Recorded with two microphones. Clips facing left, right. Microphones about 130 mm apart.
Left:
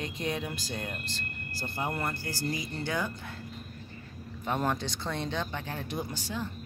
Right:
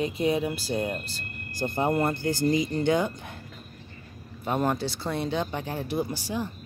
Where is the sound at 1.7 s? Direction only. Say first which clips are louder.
Right 8 dB; 25° right (ahead or behind).